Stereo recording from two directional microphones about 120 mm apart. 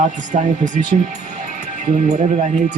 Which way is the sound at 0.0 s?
90° right.